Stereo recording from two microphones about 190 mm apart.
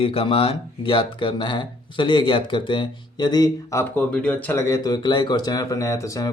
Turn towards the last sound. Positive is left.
turn(degrees=15)  # may be behind; listen again after turning